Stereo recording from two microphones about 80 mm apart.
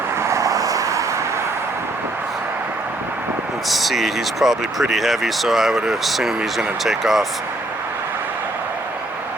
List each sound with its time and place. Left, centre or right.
0.2 s vehicle: right
3.7 s speech: centre